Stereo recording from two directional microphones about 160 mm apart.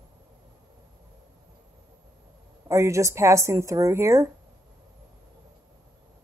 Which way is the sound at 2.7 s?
20° right (ahead or behind).